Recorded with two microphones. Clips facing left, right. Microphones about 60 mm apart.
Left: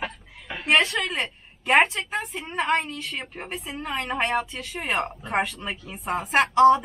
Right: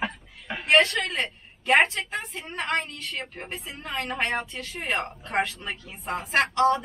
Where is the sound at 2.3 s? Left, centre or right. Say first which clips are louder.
Left 4 dB; centre.